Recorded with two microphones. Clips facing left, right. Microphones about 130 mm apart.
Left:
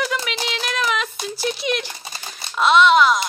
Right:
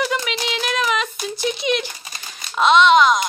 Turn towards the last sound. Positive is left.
turn(degrees=5)  # may be behind; listen again after turning